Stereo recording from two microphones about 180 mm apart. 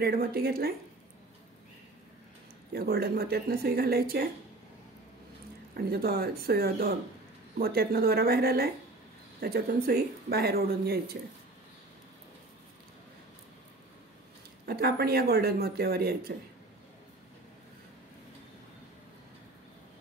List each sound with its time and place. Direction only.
0.0 s speech: 60° right (ahead or behind)
2.7 s speech: 60° right (ahead or behind)
5.8 s speech: 60° right (ahead or behind)
14.7 s speech: 60° right (ahead or behind)